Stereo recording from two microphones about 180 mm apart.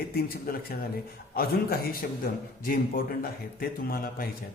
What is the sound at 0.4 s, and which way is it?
A man's voice, 55° left (ahead or behind).